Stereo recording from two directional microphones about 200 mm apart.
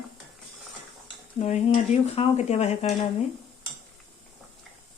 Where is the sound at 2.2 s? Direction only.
35° left (ahead or behind).